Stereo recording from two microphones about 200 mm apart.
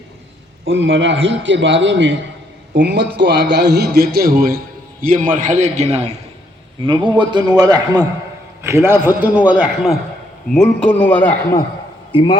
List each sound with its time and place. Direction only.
0.6 s a man's voice: 70° right (ahead or behind); by 11.6 s 10° left (ahead or behind)